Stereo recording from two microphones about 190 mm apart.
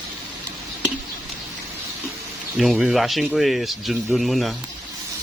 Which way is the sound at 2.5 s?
Centre (ahead or behind).